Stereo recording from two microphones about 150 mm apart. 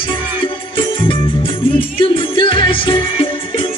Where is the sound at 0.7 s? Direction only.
35° left (ahead or behind).